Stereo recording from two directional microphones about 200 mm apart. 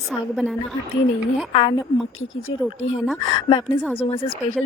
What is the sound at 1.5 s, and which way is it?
Speech, 25° left (ahead or behind).